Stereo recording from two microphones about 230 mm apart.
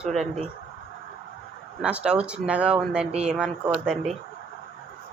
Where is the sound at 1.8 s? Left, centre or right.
Centre.